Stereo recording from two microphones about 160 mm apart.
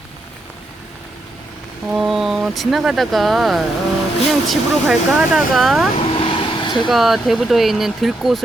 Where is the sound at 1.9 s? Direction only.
Centre (ahead or behind).